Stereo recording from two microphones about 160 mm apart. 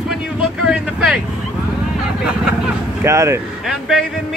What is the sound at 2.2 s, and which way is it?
Speech, 5° right (ahead or behind).